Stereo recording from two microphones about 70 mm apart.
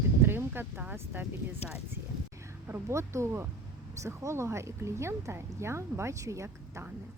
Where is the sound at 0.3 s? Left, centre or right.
Right.